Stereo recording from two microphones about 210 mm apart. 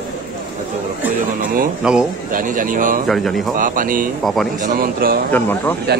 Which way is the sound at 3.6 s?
40° right (ahead or behind).